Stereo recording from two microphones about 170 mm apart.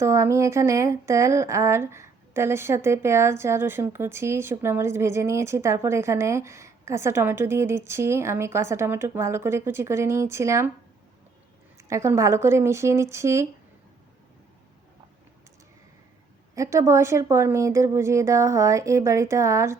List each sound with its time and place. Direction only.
0.0 s speech: 15° right (ahead or behind)
11.9 s speech: 15° right (ahead or behind)
16.6 s speech: 20° right (ahead or behind)